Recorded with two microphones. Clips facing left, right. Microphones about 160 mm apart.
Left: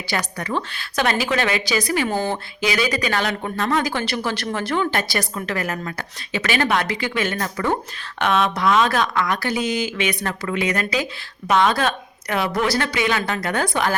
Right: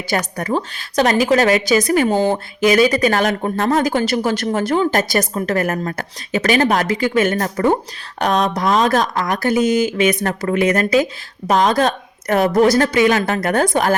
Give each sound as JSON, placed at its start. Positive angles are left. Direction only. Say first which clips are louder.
{"t": 0.1, "sound": "a woman's voice", "louder": "right 5 dB", "side_deg": -45}
{"t": 2.0, "sound": "speech", "louder": "right 7 dB", "side_deg": -20}
{"t": 2.3, "sound": "a woman's voice", "louder": "right 8 dB", "side_deg": -45}